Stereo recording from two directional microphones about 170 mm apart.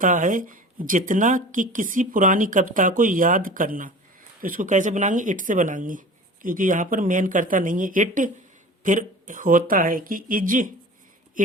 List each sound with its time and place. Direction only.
0.0 s speech: 50° right (ahead or behind)